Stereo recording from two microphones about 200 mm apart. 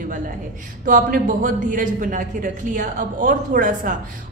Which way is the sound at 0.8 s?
40° right (ahead or behind).